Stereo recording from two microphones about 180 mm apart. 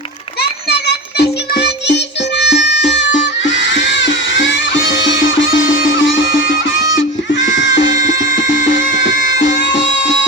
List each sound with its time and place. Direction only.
1.2 s music: 65° left (ahead or behind); by 9.9 s 90° left